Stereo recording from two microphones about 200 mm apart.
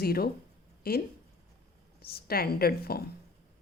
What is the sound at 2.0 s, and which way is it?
A woman's voice, 50° left (ahead or behind).